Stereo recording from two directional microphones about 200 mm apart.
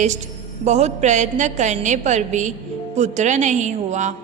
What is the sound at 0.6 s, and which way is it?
A woman's voice, 35° right (ahead or behind).